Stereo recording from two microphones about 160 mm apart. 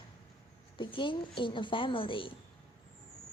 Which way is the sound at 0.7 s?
30° left (ahead or behind).